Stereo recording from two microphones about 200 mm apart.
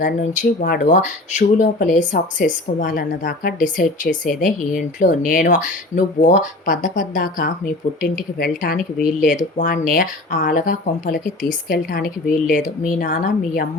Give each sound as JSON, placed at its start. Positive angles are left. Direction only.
{"t": 0.0, "sound": "a woman's voice", "side_deg": 45}